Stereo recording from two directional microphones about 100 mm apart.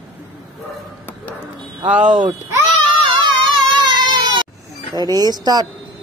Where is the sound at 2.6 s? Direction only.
50° right (ahead or behind).